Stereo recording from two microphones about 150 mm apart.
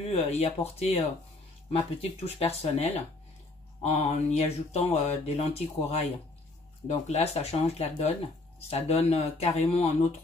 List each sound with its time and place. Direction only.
0.3 s speech: 45° left (ahead or behind)